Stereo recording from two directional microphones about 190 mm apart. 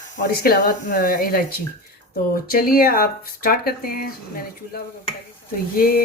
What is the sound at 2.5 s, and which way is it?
Speech, 50° left (ahead or behind).